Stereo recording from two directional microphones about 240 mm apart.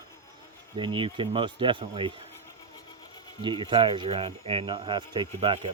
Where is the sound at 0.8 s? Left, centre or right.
Centre.